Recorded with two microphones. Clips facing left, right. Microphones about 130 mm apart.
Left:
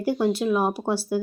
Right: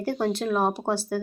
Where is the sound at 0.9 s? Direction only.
50° right (ahead or behind).